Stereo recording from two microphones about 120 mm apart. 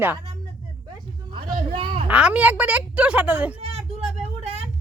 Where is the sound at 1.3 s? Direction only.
45° right (ahead or behind).